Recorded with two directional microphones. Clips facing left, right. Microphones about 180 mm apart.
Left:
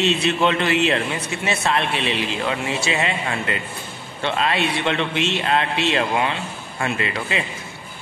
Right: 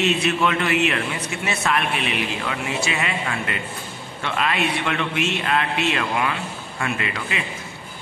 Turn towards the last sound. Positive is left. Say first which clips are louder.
# left 3 dB
turn(degrees=30)  # may be behind; listen again after turning